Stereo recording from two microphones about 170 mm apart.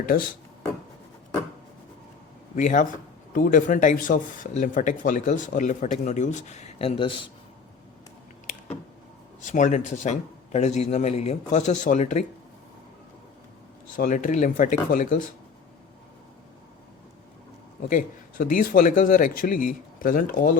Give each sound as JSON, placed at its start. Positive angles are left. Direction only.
{"t": 2.6, "sound": "speech", "side_deg": 45}
{"t": 9.4, "sound": "speech", "side_deg": 45}
{"t": 13.9, "sound": "speech", "side_deg": 50}
{"t": 17.8, "sound": "speech", "side_deg": 50}